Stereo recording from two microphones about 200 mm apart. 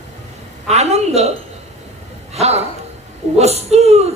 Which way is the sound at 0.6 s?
30° right (ahead or behind).